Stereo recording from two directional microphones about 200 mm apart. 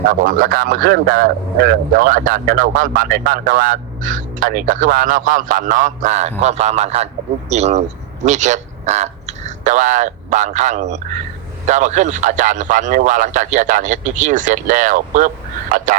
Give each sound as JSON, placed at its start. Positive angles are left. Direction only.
{"t": 0.0, "sound": "speech", "side_deg": -45}